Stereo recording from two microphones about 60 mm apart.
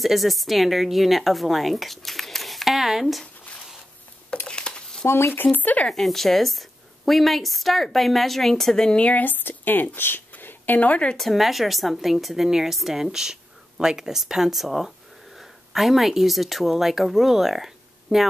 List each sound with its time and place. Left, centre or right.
0.0 s a woman's voice: centre
4.5 s a sound: centre
5.0 s speech: left
5.9 s a woman's voice: centre; by 11.1 s left
11.1 s a woman's voice: centre